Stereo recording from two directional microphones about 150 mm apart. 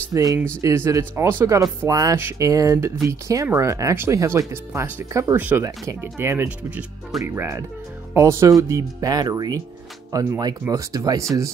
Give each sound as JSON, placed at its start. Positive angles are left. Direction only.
{"t": 0.1, "sound": "speech", "side_deg": -25}
{"t": 7.2, "sound": "speech", "side_deg": -20}